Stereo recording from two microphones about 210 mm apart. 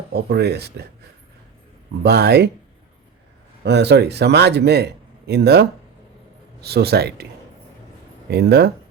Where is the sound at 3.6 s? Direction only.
55° right (ahead or behind).